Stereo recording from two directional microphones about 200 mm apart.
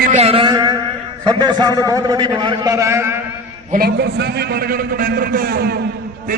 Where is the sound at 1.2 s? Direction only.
20° right (ahead or behind).